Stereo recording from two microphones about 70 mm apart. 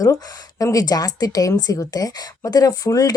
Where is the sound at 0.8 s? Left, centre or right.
Left.